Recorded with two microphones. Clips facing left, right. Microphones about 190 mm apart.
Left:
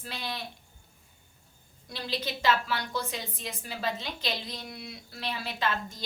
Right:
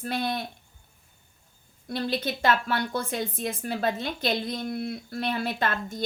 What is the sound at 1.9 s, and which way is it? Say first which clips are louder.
A woman's voice: right 6 dB; 55° right (ahead or behind).